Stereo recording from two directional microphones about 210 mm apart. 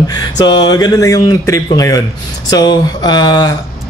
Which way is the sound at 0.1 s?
20° left (ahead or behind).